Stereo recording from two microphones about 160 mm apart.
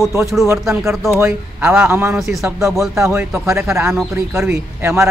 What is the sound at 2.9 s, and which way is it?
Speech, 15° right (ahead or behind).